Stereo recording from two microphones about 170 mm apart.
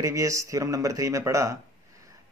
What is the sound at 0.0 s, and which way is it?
Speech, 20° right (ahead or behind).